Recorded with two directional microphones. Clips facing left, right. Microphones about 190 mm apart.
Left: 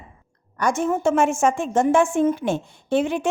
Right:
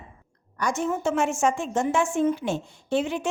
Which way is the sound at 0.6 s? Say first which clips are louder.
Left 5 dB; 55° left (ahead or behind).